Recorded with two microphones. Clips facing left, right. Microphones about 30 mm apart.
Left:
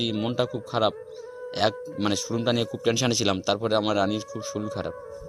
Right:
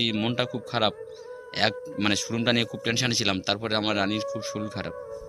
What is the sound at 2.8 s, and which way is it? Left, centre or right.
Speech, right.